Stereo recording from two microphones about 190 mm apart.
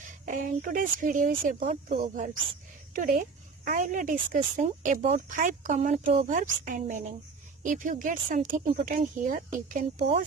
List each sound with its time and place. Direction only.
0.0 s speech: 45° right (ahead or behind)